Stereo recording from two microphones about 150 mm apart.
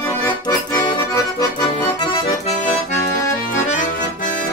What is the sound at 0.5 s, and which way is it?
Accordion, 25° left (ahead or behind).